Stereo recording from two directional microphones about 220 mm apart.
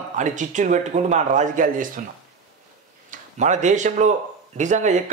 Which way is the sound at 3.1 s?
35° right (ahead or behind).